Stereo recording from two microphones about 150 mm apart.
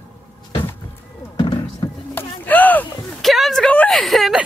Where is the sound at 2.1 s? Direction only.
15° left (ahead or behind).